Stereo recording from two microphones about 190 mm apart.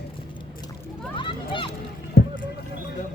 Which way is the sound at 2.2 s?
60° left (ahead or behind).